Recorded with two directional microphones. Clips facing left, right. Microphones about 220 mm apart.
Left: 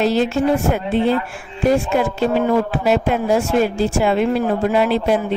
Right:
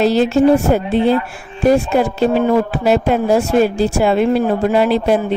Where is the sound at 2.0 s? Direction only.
35° right (ahead or behind).